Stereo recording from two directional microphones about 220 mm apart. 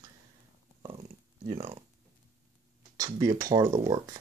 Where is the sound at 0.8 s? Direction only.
20° right (ahead or behind).